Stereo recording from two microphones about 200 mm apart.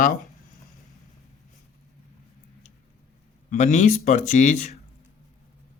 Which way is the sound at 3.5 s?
40° left (ahead or behind).